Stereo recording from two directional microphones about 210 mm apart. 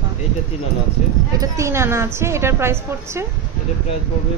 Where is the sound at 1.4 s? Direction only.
15° right (ahead or behind).